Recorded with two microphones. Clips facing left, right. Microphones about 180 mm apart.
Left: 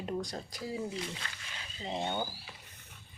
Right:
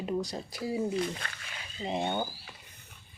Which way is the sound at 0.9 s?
55° right (ahead or behind).